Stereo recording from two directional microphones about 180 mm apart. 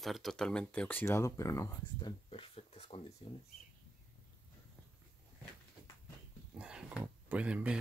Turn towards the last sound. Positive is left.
turn(degrees=-5)  # may be behind; listen again after turning